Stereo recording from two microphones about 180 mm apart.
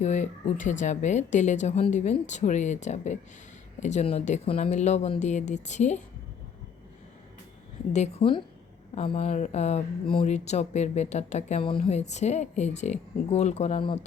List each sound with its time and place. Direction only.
0.0 s speech: 40° left (ahead or behind)
7.9 s speech: 35° left (ahead or behind)